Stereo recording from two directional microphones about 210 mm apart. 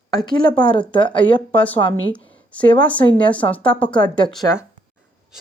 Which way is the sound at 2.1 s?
5° left (ahead or behind).